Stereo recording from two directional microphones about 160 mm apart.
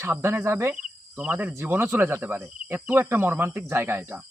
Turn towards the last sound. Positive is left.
turn(degrees=-15)  # may be behind; listen again after turning